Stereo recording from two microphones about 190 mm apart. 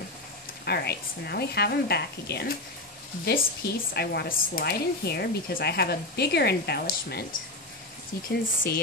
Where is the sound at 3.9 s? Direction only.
55° left (ahead or behind).